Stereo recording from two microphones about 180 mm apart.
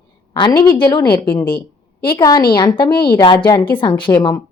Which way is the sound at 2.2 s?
20° left (ahead or behind).